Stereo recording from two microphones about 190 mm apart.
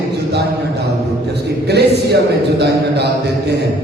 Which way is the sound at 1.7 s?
60° right (ahead or behind).